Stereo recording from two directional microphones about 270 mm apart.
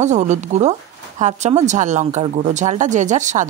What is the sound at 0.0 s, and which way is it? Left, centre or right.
Speech, right.